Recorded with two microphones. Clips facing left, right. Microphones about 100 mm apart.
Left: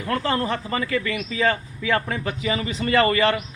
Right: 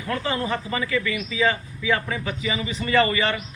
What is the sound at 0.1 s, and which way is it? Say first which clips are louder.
A man's voice: left 2 dB; 50° left (ahead or behind).